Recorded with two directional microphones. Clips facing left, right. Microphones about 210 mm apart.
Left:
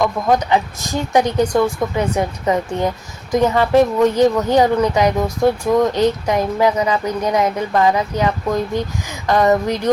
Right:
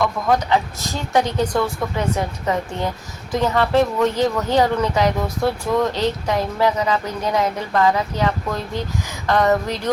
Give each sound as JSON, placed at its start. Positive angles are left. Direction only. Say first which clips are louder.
{"t": 0.0, "sound": "speech", "louder": "left 3 dB", "side_deg": 20}